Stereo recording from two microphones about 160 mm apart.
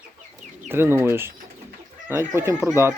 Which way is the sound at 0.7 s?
15° right (ahead or behind).